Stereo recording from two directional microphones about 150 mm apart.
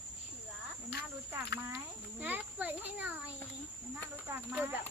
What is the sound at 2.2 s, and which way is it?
Speech, 10° right (ahead or behind).